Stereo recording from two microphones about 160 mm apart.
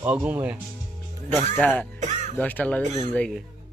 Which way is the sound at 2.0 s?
50° right (ahead or behind).